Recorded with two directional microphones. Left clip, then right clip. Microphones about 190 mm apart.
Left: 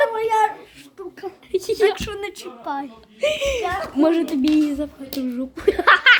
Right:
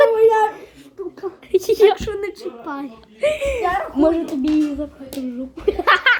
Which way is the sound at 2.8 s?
20° left (ahead or behind).